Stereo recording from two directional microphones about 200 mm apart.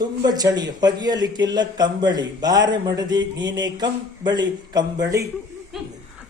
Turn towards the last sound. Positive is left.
turn(degrees=0)  # may be behind; listen again after turning